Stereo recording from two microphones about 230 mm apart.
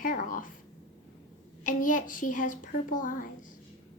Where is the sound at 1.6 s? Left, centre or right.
Left.